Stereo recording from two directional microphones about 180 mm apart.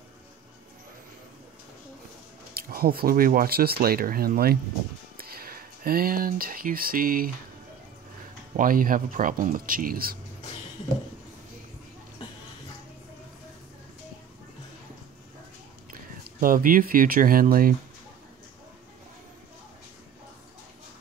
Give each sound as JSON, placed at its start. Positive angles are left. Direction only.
{"t": 2.5, "sound": "speech", "side_deg": -60}
{"t": 8.5, "sound": "speech", "side_deg": -50}
{"t": 15.9, "sound": "speech", "side_deg": -50}